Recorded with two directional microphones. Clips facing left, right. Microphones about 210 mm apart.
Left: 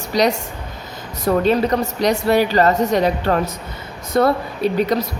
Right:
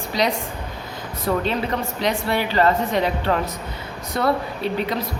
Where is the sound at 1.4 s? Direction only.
40° left (ahead or behind).